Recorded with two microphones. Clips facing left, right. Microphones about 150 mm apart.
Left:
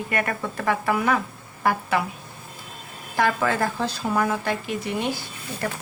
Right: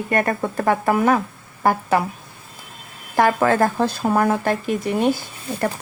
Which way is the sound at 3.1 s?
50° right (ahead or behind).